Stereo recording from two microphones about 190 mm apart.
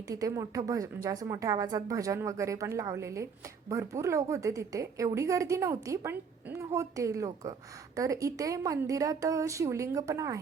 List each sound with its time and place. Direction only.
0.1 s a woman's voice: 15° right (ahead or behind)